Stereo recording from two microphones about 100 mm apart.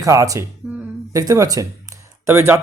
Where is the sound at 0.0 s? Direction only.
35° right (ahead or behind).